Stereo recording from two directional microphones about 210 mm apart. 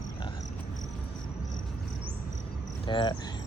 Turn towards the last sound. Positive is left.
turn(degrees=25)  # may be behind; listen again after turning